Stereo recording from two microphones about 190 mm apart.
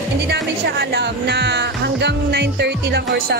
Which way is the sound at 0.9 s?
60° right (ahead or behind).